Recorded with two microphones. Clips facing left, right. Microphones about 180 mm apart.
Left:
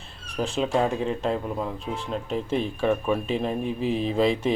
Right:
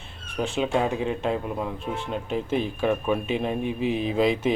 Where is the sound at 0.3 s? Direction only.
Centre (ahead or behind).